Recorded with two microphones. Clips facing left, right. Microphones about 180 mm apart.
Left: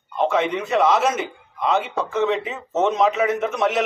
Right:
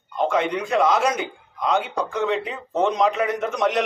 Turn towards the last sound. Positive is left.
turn(degrees=5)  # may be behind; listen again after turning